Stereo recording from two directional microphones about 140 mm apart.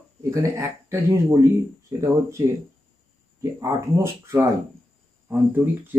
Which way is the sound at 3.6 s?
20° right (ahead or behind).